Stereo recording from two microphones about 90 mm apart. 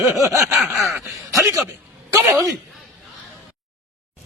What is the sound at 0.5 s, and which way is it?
Speech, centre (ahead or behind).